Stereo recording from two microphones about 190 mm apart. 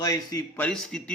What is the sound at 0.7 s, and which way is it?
Speech, 5° left (ahead or behind).